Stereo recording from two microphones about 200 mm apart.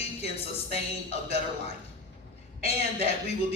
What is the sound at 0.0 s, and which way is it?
Speech, 30° left (ahead or behind).